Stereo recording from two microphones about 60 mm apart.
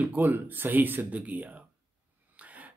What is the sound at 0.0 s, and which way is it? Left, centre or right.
Speech, right.